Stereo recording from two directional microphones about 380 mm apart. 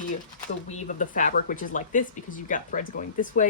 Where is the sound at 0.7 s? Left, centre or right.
Centre.